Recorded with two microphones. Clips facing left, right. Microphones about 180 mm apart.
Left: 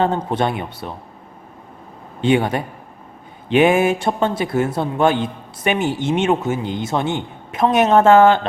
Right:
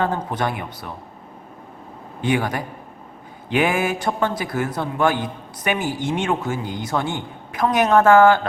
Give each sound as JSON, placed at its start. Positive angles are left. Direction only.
{"t": 0.0, "sound": "a man's voice", "side_deg": 25}
{"t": 2.2, "sound": "a man's voice", "side_deg": 25}